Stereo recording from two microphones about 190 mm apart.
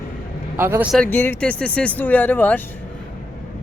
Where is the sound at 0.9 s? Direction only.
10° left (ahead or behind).